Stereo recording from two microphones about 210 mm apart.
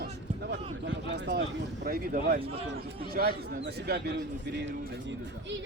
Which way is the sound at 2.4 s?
25° right (ahead or behind).